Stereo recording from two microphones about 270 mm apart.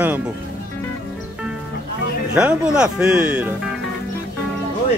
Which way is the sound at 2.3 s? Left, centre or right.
Centre.